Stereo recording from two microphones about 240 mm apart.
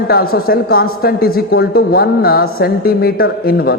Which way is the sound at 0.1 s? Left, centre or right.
Left.